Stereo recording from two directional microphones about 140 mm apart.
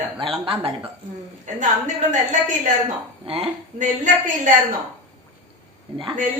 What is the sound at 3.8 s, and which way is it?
Speech, 65° right (ahead or behind).